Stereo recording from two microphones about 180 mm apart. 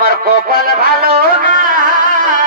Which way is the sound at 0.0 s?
55° right (ahead or behind).